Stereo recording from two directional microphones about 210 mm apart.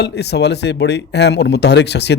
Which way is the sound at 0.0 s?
50° left (ahead or behind).